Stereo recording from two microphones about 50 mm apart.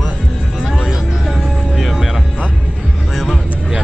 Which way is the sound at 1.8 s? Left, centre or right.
Centre.